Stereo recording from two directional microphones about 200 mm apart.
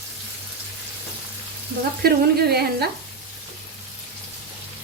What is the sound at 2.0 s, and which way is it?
Speech, 50° right (ahead or behind).